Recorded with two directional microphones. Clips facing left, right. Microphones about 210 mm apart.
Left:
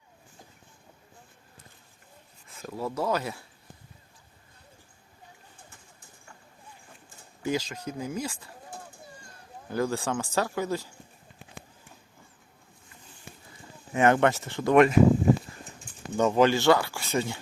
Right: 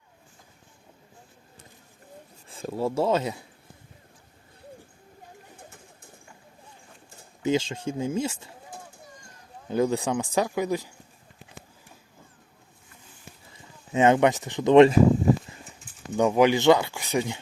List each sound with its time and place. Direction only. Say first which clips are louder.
2.5 s speech: right 6 dB; 30° right (ahead or behind)
7.4 s speech: right 5 dB; 25° right (ahead or behind)
9.6 s speech: right 4 dB; 20° right (ahead or behind)
13.9 s speech: right 2 dB; 20° right (ahead or behind)
16.1 s speech: right 2 dB; 10° right (ahead or behind)